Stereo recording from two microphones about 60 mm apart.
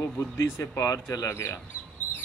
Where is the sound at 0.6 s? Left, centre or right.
Left.